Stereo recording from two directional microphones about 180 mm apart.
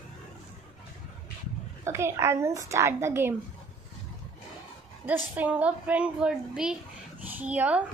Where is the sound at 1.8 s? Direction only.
15° right (ahead or behind).